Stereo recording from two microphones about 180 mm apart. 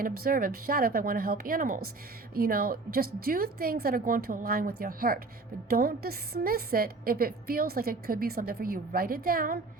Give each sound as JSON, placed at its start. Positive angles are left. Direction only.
{"t": 0.0, "sound": "a woman's voice", "side_deg": -50}